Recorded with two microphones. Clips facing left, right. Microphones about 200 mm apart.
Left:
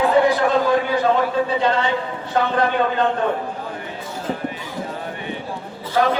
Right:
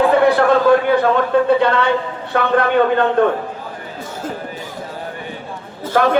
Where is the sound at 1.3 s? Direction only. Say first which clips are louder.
Right 6 dB; 60° right (ahead or behind).